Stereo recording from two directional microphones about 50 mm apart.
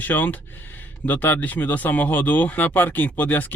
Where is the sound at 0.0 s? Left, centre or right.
Left.